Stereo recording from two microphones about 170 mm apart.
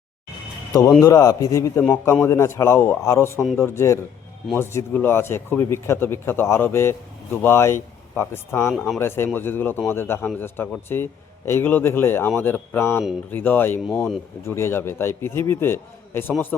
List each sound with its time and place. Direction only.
0.7 s a man's voice: 20° left (ahead or behind)
8.7 s speech: centre (ahead or behind)
9.0 s a man's voice: 15° left (ahead or behind)